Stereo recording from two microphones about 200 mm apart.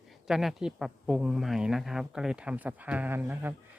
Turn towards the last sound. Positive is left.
turn(degrees=-10)  # may be behind; listen again after turning